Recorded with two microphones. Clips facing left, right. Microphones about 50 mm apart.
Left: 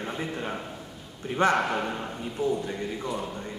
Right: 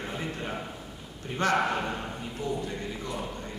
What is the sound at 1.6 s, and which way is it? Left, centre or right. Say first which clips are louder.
Mantra: left 1 dB; centre.